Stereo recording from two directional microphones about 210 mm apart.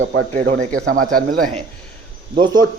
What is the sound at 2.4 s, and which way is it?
Speech, 20° right (ahead or behind).